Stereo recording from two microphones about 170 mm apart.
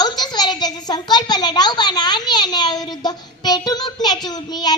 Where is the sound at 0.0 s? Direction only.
25° left (ahead or behind).